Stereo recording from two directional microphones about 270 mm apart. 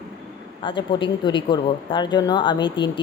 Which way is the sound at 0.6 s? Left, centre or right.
Centre.